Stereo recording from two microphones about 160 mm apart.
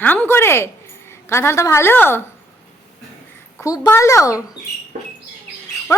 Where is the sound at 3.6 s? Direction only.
20° left (ahead or behind).